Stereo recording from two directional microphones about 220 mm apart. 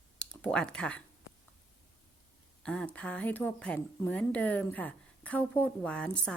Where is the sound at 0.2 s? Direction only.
5° left (ahead or behind).